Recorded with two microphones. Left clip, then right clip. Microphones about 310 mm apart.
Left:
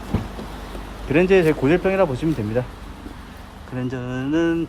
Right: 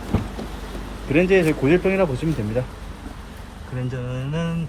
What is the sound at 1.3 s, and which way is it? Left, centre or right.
Speech, centre.